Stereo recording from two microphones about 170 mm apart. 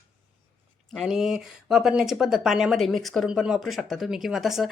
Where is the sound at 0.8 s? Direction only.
Centre (ahead or behind).